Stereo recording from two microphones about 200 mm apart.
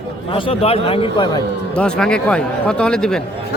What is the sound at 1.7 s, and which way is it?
Speech, 5° left (ahead or behind).